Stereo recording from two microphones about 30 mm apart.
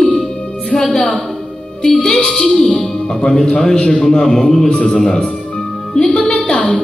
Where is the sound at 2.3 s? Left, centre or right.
Centre.